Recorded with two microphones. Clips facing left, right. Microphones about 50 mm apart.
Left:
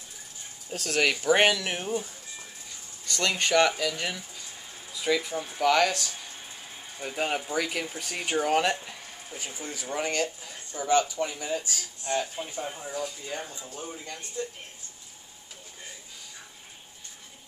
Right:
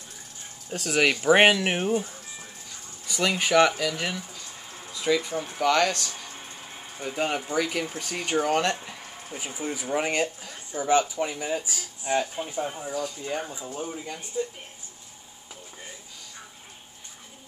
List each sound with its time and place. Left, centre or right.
0.7 s speech: centre
1.2 s speech: right
3.1 s speech: centre
9.3 s speech: centre
12.8 s speech: centre
13.2 s speech: centre